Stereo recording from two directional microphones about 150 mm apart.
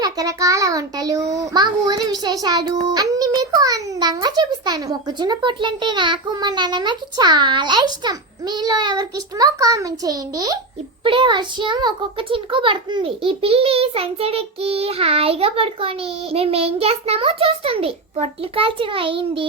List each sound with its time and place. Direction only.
0.0 s a child's voice: 25° right (ahead or behind)